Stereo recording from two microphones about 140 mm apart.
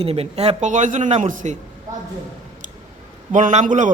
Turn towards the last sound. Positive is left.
turn(degrees=-60)  # may be behind; listen again after turning